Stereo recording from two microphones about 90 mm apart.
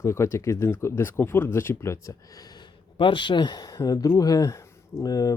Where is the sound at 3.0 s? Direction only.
65° left (ahead or behind); by 5.4 s 45° left (ahead or behind).